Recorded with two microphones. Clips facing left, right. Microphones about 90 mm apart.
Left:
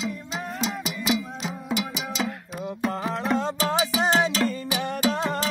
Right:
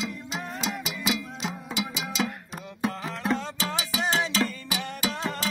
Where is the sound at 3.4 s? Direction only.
40° left (ahead or behind).